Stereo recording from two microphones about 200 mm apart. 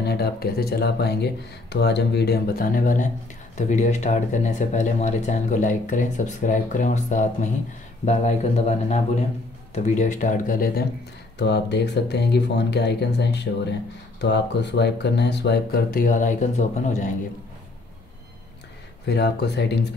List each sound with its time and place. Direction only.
0.0 s speech: 55° left (ahead or behind); by 17.1 s 35° left (ahead or behind)
19.0 s speech: 55° left (ahead or behind)